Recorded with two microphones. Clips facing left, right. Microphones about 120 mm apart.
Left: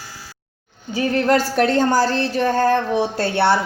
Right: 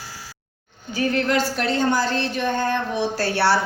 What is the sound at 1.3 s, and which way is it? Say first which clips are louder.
A woman's voice: left 5 dB; 40° left (ahead or behind).